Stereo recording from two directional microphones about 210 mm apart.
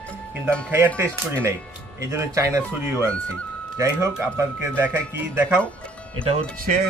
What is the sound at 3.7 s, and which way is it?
Speech, 15° right (ahead or behind).